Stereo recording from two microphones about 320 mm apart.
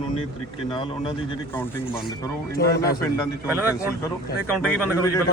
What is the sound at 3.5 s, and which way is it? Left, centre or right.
Speech, centre.